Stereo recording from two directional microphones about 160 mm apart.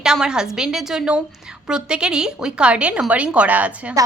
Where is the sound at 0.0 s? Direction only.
5° right (ahead or behind).